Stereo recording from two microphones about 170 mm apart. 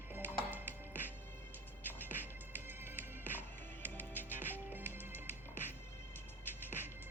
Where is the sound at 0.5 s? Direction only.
10° right (ahead or behind).